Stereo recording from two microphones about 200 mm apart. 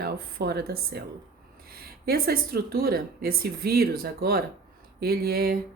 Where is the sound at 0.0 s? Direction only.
50° right (ahead or behind).